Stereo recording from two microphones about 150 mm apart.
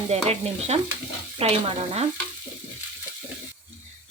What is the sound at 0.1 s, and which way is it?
Speech, 45° right (ahead or behind).